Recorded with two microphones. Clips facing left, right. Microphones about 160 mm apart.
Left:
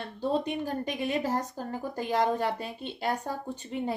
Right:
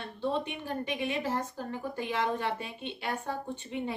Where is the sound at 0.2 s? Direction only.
40° left (ahead or behind).